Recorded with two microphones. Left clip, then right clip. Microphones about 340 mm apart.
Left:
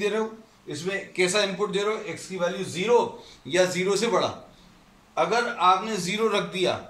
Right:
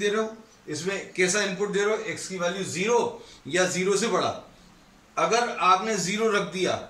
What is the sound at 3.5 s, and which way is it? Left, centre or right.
A man's voice, centre.